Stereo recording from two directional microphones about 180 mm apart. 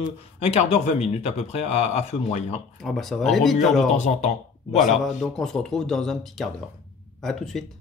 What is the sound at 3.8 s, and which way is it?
Speech, 40° left (ahead or behind).